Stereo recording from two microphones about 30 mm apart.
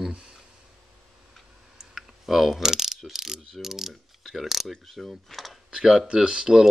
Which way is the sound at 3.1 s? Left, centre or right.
Centre.